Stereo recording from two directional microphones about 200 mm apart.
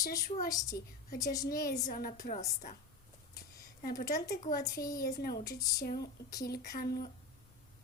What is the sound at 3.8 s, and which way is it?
Speech, 45° left (ahead or behind).